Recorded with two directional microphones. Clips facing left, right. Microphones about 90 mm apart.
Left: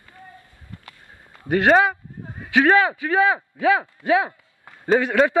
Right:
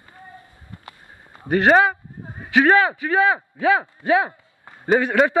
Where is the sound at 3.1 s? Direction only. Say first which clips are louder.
Even; 10° left (ahead or behind).